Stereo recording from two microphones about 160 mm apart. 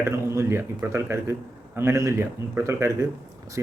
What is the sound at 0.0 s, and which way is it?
Speech, 15° right (ahead or behind).